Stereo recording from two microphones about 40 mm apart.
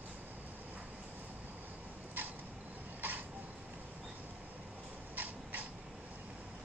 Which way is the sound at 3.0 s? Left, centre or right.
Right.